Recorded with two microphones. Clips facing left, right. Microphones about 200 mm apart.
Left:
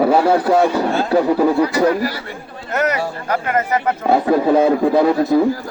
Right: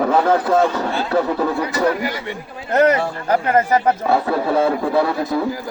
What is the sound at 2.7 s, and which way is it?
Speech, 30° right (ahead or behind).